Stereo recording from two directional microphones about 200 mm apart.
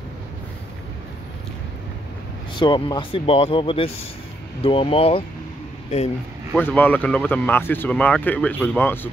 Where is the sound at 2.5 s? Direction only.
25° left (ahead or behind).